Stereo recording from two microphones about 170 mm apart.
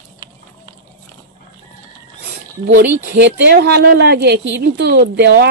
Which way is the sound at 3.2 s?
85° right.